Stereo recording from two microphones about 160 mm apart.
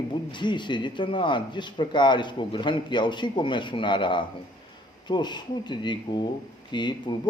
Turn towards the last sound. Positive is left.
turn(degrees=30)  # may be behind; listen again after turning